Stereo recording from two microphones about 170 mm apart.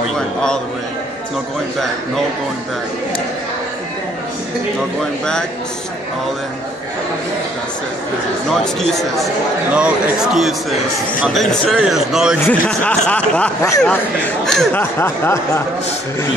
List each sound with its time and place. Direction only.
8.5 s a man's voice: centre (ahead or behind)
12.6 s speech: 10° left (ahead or behind)
13.6 s speech: 20° left (ahead or behind)
14.4 s speech: centre (ahead or behind)